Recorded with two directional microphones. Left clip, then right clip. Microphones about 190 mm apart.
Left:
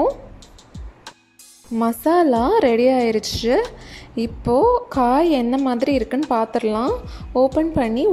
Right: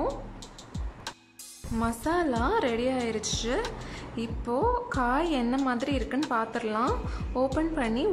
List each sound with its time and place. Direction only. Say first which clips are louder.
1.8 s a woman's voice: left 11 dB; 30° left (ahead or behind)